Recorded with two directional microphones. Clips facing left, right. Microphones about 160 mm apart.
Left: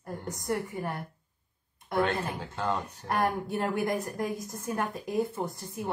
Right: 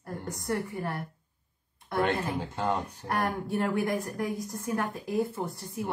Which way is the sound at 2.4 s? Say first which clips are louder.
Right 1 dB; 10° right (ahead or behind).